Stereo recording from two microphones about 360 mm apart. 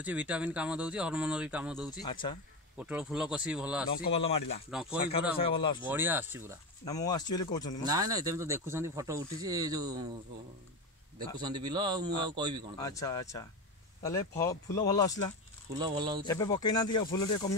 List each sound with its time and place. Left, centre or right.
0.0 s speech: centre
2.0 s speech: centre
2.8 s speech: centre
4.1 s speech: centre
4.6 s speech: centre
5.4 s speech: centre
5.9 s speech: centre
6.8 s speech: centre
7.8 s speech: centre
11.1 s speech: centre
12.7 s speech: centre
15.8 s speech: centre
16.3 s speech: centre